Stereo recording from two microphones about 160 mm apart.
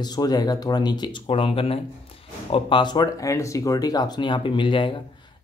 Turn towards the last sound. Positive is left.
turn(degrees=30)  # may be behind; listen again after turning